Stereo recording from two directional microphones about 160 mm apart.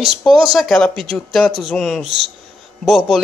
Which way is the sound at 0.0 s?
Centre (ahead or behind).